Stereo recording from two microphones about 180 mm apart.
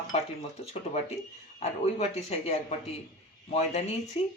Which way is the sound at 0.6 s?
35° left (ahead or behind).